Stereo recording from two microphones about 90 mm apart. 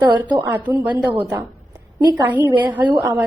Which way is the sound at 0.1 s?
55° right (ahead or behind).